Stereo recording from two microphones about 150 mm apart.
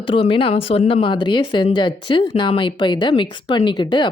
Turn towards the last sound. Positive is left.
turn(degrees=30)  # may be behind; listen again after turning